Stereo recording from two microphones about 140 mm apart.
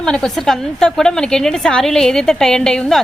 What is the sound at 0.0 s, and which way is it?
A woman's voice, 5° left (ahead or behind).